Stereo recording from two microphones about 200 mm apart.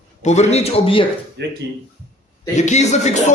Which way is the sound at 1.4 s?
60° right (ahead or behind).